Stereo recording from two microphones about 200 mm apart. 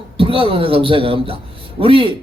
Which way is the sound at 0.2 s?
25° right (ahead or behind).